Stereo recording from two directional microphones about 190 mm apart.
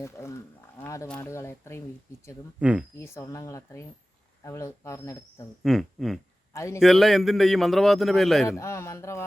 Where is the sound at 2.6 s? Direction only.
5° right (ahead or behind).